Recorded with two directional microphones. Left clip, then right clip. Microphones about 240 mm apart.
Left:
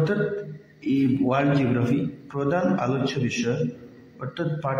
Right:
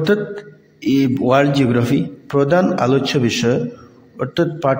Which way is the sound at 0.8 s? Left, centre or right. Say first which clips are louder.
Right 7 dB; right.